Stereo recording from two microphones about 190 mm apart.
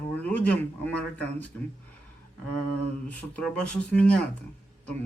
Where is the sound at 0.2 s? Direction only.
10° left (ahead or behind).